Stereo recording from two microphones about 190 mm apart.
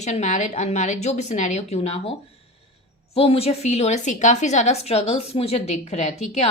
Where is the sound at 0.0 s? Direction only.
35° left (ahead or behind).